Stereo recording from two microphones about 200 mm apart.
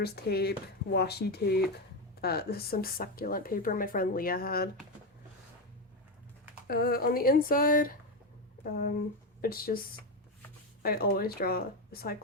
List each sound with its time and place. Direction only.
0.0 s speech: 55° left (ahead or behind)
6.7 s speech: 50° left (ahead or behind)
9.4 s speech: 45° left (ahead or behind)
10.8 s speech: 50° left (ahead or behind)